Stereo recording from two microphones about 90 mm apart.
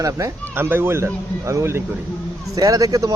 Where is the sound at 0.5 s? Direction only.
25° right (ahead or behind).